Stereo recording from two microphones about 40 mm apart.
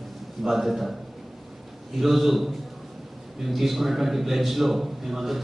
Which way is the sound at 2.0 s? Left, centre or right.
Centre.